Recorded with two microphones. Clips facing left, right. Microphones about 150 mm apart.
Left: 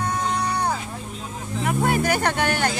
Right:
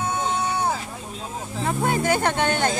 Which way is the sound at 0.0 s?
5° right (ahead or behind).